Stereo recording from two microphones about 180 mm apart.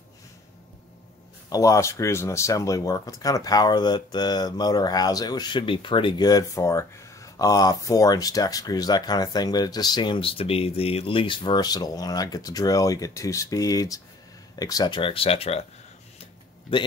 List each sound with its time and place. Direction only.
1.5 s speech: 20° left (ahead or behind); by 15.6 s 35° left (ahead or behind)
16.7 s speech: 30° left (ahead or behind)